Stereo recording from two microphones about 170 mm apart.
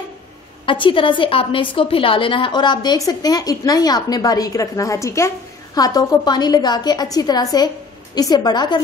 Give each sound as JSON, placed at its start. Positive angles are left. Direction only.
{"t": 0.7, "sound": "a woman's voice", "side_deg": 30}